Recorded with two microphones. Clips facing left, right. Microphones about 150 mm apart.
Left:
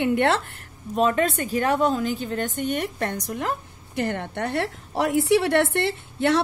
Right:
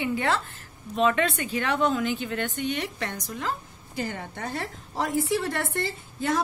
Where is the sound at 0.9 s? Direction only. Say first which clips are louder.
Left 2 dB; 40° left (ahead or behind).